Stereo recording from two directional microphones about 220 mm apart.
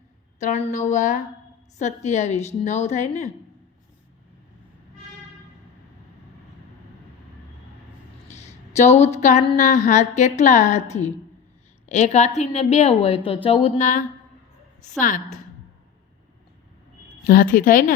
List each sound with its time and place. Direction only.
0.3 s speech: 30° left (ahead or behind)
8.3 s a woman's voice: 30° left (ahead or behind)
17.2 s speech: 40° left (ahead or behind)